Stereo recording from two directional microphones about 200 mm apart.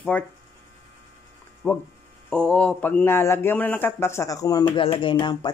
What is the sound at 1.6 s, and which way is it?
A man's voice, 5° left (ahead or behind).